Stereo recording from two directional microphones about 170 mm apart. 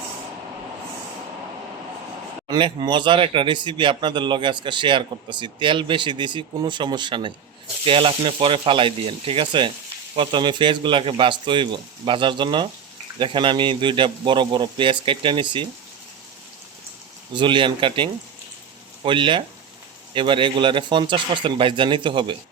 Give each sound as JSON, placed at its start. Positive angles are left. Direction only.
{"t": 2.5, "sound": "speech", "side_deg": -25}
{"t": 17.3, "sound": "speech", "side_deg": -30}